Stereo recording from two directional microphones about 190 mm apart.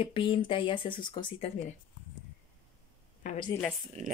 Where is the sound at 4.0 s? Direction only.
40° right (ahead or behind).